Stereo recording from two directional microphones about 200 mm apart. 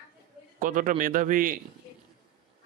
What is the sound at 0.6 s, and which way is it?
Speech, 40° right (ahead or behind).